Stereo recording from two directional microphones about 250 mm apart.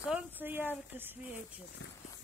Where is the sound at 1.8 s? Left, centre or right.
Left.